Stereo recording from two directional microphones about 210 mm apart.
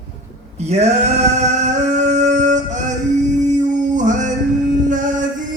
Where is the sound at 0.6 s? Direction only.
30° right (ahead or behind).